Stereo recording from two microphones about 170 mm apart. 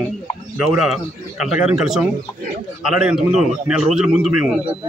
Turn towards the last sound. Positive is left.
turn(degrees=-5)  # may be behind; listen again after turning